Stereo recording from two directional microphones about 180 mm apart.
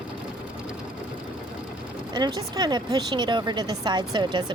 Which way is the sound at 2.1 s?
25° right (ahead or behind).